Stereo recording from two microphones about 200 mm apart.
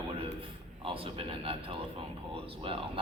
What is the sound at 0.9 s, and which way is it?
A man's voice, 25° right (ahead or behind).